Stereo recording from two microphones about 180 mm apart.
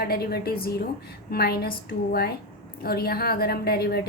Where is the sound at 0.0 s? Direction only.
55° left (ahead or behind).